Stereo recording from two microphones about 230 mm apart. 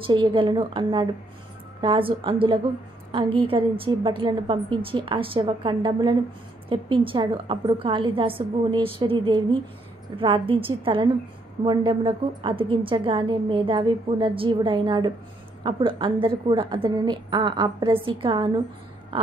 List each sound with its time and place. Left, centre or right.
0.0 s a woman's voice: right